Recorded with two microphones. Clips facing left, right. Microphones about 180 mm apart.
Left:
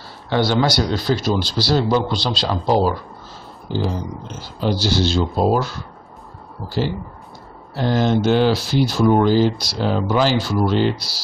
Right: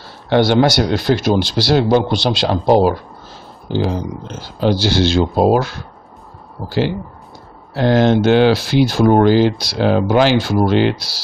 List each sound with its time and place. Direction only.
0.3 s speech: 65° right (ahead or behind)
3.7 s speech: 75° right (ahead or behind)
7.7 s speech: 70° right (ahead or behind)